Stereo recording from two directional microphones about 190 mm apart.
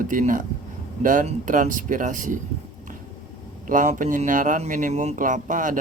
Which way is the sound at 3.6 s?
45° right (ahead or behind).